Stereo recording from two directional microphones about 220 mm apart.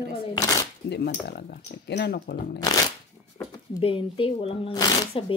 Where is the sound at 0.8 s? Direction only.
50° left (ahead or behind).